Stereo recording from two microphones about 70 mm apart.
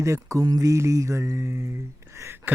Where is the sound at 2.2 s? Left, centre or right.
Right.